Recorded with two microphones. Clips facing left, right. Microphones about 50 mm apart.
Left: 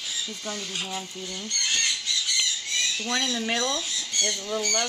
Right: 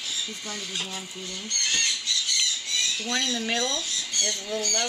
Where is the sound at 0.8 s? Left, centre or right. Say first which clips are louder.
Left 2 dB; centre.